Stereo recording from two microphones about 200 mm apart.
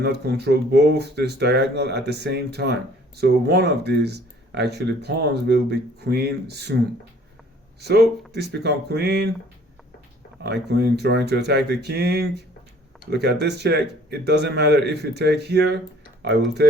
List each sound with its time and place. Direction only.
0.0 s speech: 55° right (ahead or behind)
7.8 s speech: 55° right (ahead or behind)
10.4 s speech: 55° right (ahead or behind)